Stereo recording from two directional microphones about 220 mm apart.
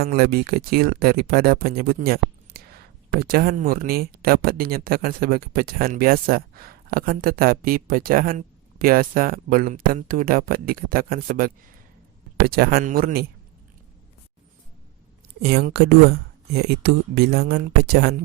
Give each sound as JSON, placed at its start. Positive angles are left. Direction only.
{"t": 0.0, "sound": "speech", "side_deg": -45}
{"t": 15.4, "sound": "speech", "side_deg": -45}